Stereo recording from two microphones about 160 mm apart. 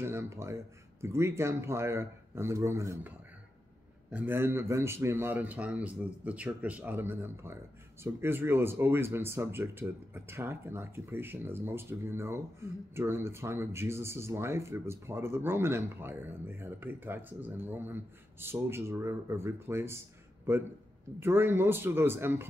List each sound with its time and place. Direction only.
0.0 s speech: 15° right (ahead or behind)
4.1 s speech: 15° right (ahead or behind)